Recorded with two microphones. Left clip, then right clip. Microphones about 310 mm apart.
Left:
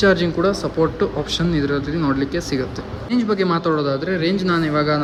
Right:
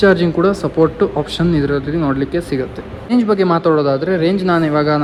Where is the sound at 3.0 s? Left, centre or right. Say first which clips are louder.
Right 5 dB; centre.